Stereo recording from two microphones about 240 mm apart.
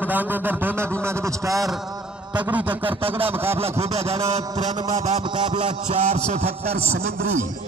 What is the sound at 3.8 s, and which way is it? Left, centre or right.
A man's voice, right.